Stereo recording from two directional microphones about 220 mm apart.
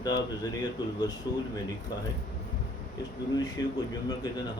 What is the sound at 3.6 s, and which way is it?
Speech, 15° left (ahead or behind).